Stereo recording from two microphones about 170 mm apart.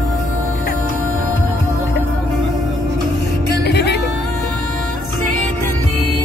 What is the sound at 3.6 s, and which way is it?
Music, 80° left.